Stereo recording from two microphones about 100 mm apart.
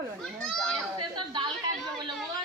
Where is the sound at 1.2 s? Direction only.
55° right (ahead or behind).